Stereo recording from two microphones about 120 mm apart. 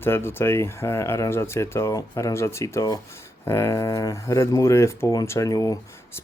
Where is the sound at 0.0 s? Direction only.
20° left (ahead or behind).